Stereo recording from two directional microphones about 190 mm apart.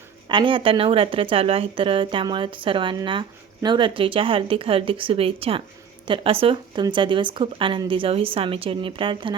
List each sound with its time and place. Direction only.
0.3 s speech: 25° right (ahead or behind)